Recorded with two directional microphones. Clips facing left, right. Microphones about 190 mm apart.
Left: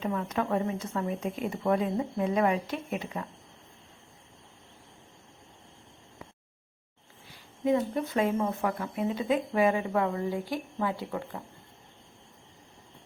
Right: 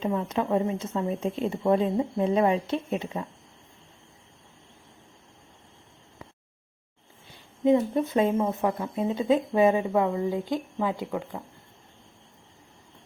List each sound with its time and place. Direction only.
0.0 s speech: 25° right (ahead or behind)
7.3 s speech: 25° right (ahead or behind)